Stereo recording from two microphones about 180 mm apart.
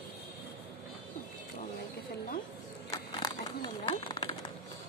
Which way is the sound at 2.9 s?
20° left (ahead or behind).